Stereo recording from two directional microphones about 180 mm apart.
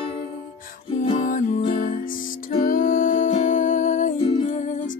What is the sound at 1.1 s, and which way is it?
Music, 45° left (ahead or behind).